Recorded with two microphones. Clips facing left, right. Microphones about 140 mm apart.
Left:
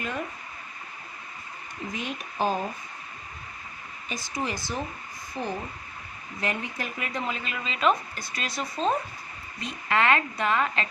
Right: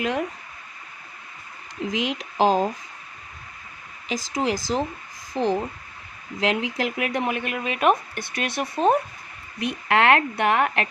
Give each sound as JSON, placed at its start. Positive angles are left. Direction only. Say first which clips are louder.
{"t": 0.0, "sound": "speech", "louder": "right 7 dB", "side_deg": -90}
{"t": 1.9, "sound": "speech", "louder": "right 8 dB", "side_deg": -90}
{"t": 4.1, "sound": "speech", "louder": "right 7 dB", "side_deg": -90}